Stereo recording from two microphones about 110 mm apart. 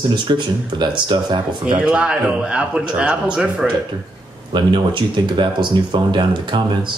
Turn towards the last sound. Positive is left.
turn(degrees=-45)  # may be behind; listen again after turning